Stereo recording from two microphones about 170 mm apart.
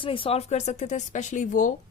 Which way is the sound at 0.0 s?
30° left (ahead or behind).